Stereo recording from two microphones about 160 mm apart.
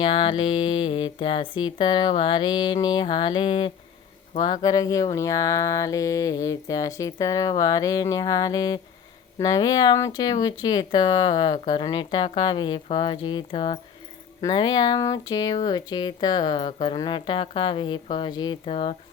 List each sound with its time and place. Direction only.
0.0 s speech: 35° left (ahead or behind)